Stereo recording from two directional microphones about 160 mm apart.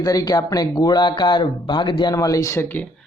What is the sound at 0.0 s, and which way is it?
Speech, 25° left (ahead or behind).